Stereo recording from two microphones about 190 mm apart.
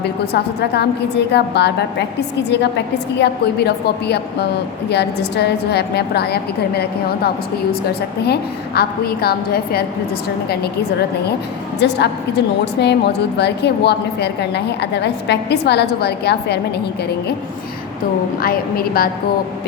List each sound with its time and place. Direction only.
0.0 s a woman's voice: 60° left (ahead or behind)
11.8 s a woman's voice: 60° left (ahead or behind)